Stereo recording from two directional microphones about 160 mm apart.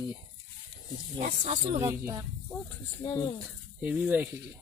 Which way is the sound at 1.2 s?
45° right (ahead or behind).